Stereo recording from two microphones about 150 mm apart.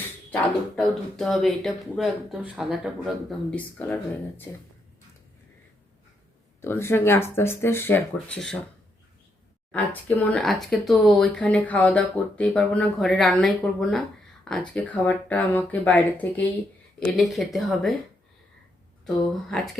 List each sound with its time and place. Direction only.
0.8 s speech: centre (ahead or behind)
3.8 s speech: 10° left (ahead or behind)
6.6 s speech: 15° left (ahead or behind)
9.7 s speech: 10° left (ahead or behind)
19.0 s speech: centre (ahead or behind)